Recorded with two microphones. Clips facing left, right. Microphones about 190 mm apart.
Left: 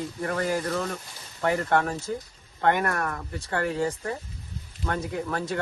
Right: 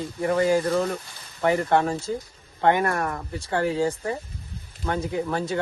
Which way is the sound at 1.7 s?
20° right (ahead or behind).